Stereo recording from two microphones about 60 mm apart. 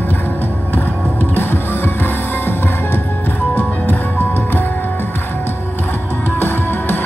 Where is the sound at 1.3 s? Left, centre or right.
Left.